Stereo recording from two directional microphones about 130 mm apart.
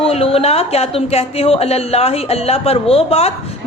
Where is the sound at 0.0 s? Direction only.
50° left (ahead or behind).